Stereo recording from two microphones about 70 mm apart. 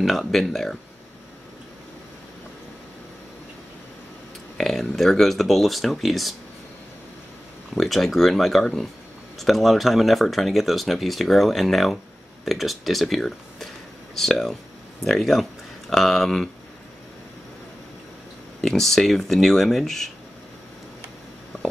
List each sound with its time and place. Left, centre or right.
0.0 s speech: centre
4.6 s speech: centre
7.7 s speech: centre
18.6 s speech: centre